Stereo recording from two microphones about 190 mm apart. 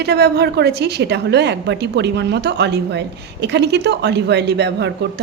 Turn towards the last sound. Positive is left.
turn(degrees=-65)  # may be behind; listen again after turning